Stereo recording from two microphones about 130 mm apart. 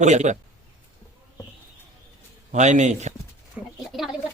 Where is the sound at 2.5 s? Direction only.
65° right (ahead or behind).